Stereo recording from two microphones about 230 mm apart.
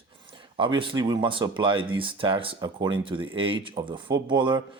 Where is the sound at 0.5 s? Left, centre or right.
Right.